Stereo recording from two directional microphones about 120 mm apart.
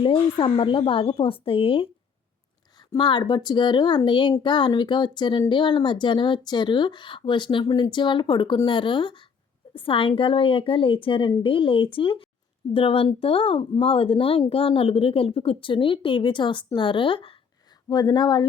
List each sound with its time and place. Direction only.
0.0 s a woman's voice: 45° left (ahead or behind)
2.7 s a woman's voice: 35° left (ahead or behind)
17.8 s speech: 35° left (ahead or behind)